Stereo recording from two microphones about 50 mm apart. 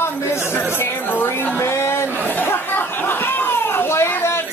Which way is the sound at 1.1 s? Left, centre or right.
Left.